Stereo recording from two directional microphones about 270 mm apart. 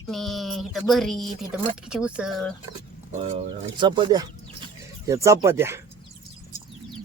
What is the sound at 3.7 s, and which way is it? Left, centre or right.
Speech, centre.